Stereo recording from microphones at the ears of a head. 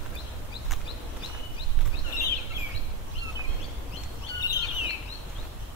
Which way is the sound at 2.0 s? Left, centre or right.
Left.